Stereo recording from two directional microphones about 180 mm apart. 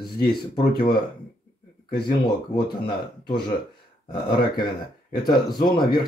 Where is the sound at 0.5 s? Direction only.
25° left (ahead or behind).